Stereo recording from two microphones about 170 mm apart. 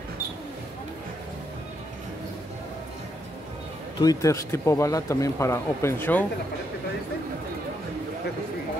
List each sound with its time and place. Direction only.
4.0 s speech: 20° left (ahead or behind)